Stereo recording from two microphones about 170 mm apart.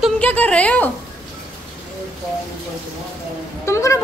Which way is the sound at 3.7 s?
15° left (ahead or behind).